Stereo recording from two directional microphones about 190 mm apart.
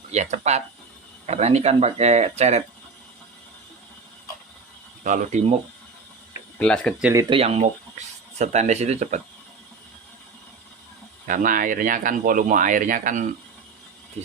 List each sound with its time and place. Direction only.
0.1 s speech: 35° right (ahead or behind)
5.0 s speech: 45° right (ahead or behind)
6.6 s speech: 5° left (ahead or behind)
7.0 s speech: 15° right (ahead or behind)
7.3 s speech: 30° right (ahead or behind)
11.3 s speech: 45° right (ahead or behind)